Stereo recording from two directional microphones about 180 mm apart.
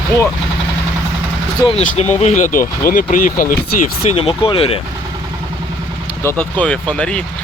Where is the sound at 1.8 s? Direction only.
40° left (ahead or behind).